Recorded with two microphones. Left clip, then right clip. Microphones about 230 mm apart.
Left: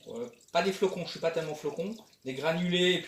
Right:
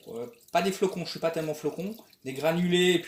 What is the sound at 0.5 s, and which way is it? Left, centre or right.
Speech, right.